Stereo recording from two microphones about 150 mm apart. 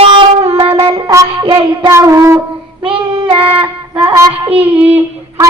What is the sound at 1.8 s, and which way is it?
Speech, 20° right (ahead or behind).